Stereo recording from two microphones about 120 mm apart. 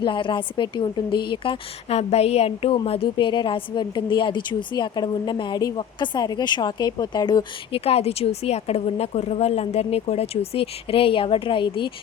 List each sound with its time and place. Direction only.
0.0 s a woman's voice: 40° left (ahead or behind)
1.9 s a woman's voice: 60° left (ahead or behind); by 7.4 s 35° left (ahead or behind)
7.7 s a woman's voice: 55° left (ahead or behind)